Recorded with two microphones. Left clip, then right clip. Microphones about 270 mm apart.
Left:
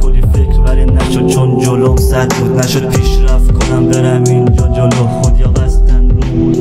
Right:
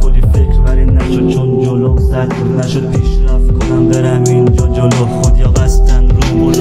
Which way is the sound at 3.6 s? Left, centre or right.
Centre.